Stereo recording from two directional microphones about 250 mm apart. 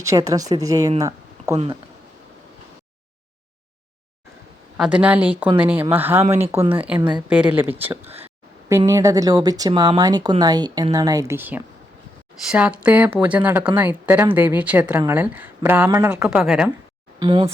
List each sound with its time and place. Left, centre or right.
0.0 s a woman's voice: centre
4.8 s a woman's voice: centre
17.2 s speech: right